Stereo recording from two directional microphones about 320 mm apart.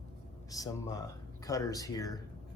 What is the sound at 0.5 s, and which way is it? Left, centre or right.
Speech, centre.